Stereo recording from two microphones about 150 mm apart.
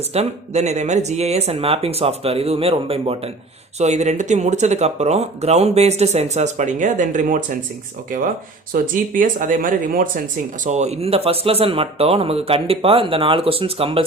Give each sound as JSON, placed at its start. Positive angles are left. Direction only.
{"t": 0.1, "sound": "speech", "side_deg": -45}
{"t": 8.7, "sound": "speech", "side_deg": -65}
{"t": 10.6, "sound": "speech", "side_deg": -50}